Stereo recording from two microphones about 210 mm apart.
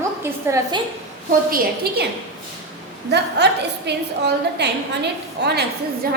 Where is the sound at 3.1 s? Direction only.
55° right (ahead or behind).